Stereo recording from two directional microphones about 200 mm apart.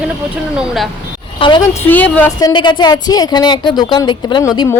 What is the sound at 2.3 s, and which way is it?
A woman's voice, 20° left (ahead or behind).